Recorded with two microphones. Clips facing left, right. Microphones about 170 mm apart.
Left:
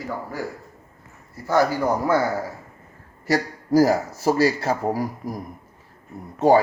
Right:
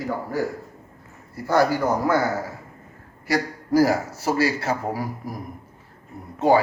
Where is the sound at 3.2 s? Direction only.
40° left (ahead or behind).